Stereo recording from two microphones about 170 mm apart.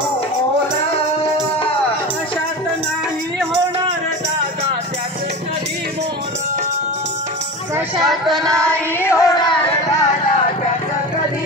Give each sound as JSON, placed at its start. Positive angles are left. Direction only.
{"t": 8.5, "sound": "music", "side_deg": 5}